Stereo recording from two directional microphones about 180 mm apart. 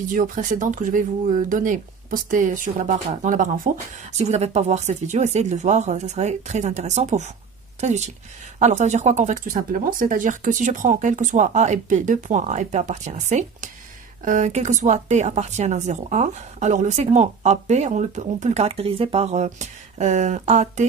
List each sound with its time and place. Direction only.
0.1 s speech: 45° right (ahead or behind)
8.5 s speech: 40° right (ahead or behind)